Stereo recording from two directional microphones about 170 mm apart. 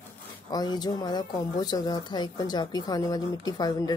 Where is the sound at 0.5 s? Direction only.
25° left (ahead or behind).